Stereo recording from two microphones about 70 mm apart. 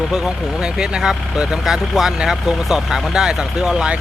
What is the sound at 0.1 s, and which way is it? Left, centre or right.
Speech, centre.